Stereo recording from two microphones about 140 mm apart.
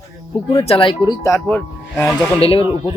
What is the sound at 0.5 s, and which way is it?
Speech, 45° left (ahead or behind).